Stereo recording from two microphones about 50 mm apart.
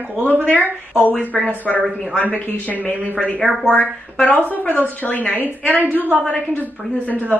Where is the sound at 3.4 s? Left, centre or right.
Centre.